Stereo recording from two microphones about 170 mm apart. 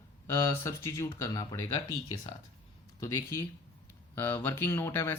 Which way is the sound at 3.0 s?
20° left (ahead or behind).